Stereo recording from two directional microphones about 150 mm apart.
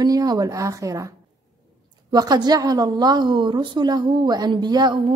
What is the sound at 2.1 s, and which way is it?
A woman's voice, 25° right (ahead or behind).